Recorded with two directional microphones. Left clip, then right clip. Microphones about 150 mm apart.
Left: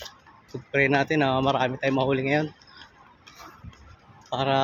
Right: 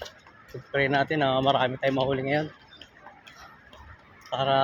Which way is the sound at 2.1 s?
45° left (ahead or behind).